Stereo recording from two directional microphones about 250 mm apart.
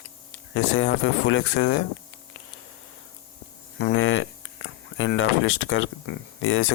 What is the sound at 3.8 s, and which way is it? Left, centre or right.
Speech, left.